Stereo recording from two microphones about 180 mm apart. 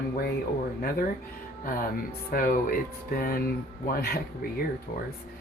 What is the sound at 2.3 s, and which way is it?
Speech, 50° left (ahead or behind).